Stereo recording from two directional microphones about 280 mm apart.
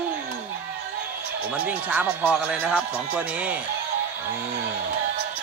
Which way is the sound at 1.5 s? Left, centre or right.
Centre.